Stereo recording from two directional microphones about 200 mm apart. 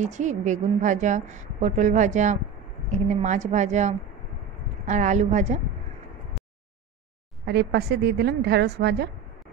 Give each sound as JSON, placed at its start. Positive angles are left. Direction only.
{"t": 0.0, "sound": "a woman's voice", "side_deg": -35}
{"t": 7.4, "sound": "a woman's voice", "side_deg": -55}